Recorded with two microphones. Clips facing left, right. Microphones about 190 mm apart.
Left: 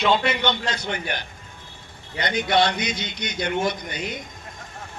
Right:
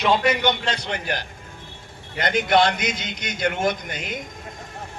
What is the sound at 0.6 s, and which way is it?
Speech, 30° right (ahead or behind).